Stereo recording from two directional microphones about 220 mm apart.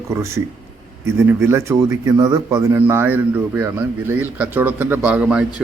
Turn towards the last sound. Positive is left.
turn(degrees=-5)  # may be behind; listen again after turning